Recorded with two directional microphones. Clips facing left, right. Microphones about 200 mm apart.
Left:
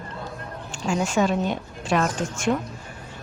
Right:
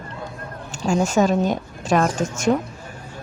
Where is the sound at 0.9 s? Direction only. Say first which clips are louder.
Right 4 dB; 45° right (ahead or behind).